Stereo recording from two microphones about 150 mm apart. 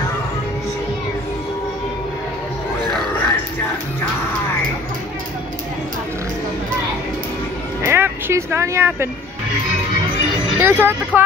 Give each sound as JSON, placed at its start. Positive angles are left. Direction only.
{"t": 7.8, "sound": "music", "side_deg": -15}
{"t": 10.6, "sound": "speech", "side_deg": -15}